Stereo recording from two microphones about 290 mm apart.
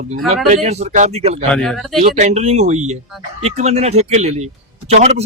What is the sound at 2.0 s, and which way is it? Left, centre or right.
Speech, right.